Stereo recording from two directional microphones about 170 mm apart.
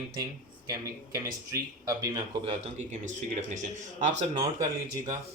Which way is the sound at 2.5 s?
45° right (ahead or behind).